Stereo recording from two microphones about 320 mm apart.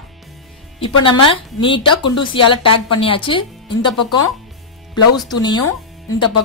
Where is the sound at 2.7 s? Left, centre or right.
Left.